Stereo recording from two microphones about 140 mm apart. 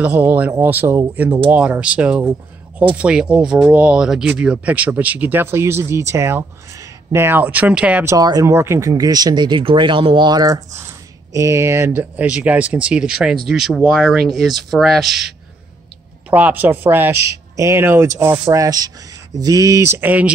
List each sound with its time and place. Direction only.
0.0 s speech: 10° right (ahead or behind)
8.1 s speech: 25° right (ahead or behind); by 15.2 s centre (ahead or behind)
16.3 s speech: 10° right (ahead or behind)